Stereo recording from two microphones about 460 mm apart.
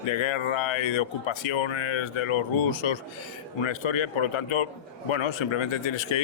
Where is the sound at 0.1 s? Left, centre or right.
Left.